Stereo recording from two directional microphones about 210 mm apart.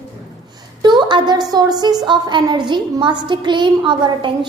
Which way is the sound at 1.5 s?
20° right (ahead or behind).